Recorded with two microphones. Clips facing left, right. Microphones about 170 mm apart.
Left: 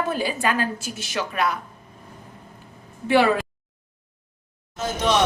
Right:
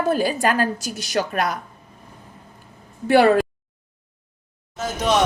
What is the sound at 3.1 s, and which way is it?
Speech, 45° right (ahead or behind).